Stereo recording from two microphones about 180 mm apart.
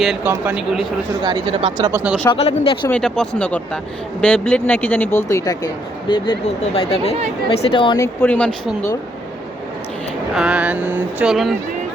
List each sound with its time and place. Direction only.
0.0 s speech: centre (ahead or behind)
1.2 s speech: 25° right (ahead or behind)
1.9 s speech: 10° right (ahead or behind)
2.3 s speech: 30° left (ahead or behind)
2.9 s speech: 5° left (ahead or behind); by 8.0 s 25° left (ahead or behind)
8.0 s speech: 10° left (ahead or behind)
10.3 s speech: 5° right (ahead or behind)